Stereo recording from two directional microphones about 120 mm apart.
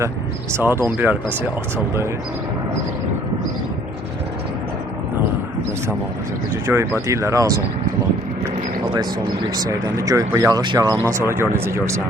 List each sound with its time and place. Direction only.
0.5 s speech: 20° right (ahead or behind)
6.7 s speech: 20° right (ahead or behind)
9.6 s speech: 30° right (ahead or behind)